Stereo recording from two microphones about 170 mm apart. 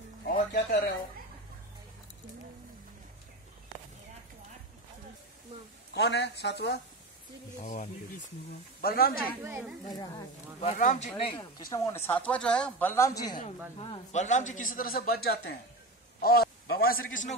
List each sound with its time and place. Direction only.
0.3 s music: 65° left (ahead or behind)
5.9 s speech: 90° left
7.6 s a man's voice: 45° left (ahead or behind)
8.8 s a man's voice: 65° left (ahead or behind)
9.4 s speech: 10° right (ahead or behind)
9.8 s speech: 25° left (ahead or behind)
10.6 s a man's voice: 45° left (ahead or behind)
11.1 s speech: 30° left (ahead or behind)
11.7 s a woman's voice: 15° left (ahead or behind)
13.7 s a man's voice: 45° left (ahead or behind)